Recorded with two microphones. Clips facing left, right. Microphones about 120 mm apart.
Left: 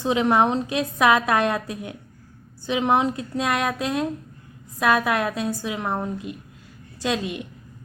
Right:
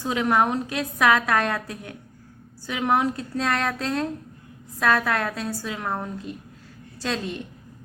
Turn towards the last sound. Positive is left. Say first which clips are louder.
# left 3 dB
turn(degrees=15)  # may be behind; listen again after turning